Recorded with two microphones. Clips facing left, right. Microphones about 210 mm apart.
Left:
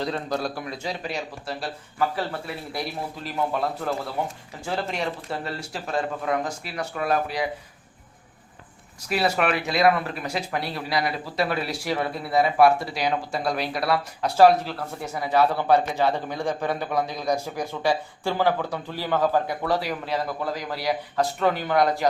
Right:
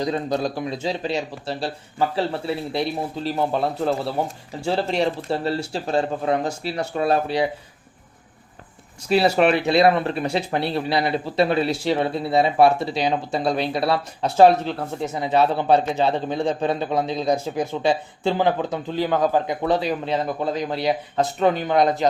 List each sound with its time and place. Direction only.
0.0 s speech: 20° right (ahead or behind)
9.0 s speech: 30° right (ahead or behind)